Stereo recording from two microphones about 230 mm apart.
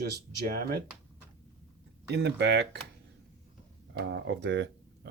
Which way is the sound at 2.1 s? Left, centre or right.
Right.